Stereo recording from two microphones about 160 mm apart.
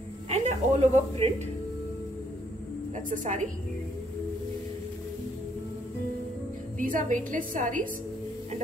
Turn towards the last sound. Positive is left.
turn(degrees=-55)  # may be behind; listen again after turning